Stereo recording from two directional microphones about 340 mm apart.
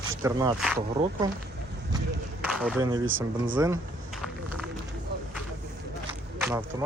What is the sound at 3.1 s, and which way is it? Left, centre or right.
Speech, right.